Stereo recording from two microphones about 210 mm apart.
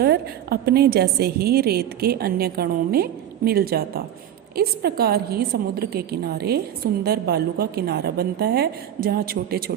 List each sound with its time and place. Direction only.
0.0 s a woman's voice: 50° right (ahead or behind)